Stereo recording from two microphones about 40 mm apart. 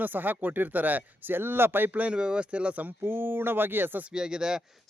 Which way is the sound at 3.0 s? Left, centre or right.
Right.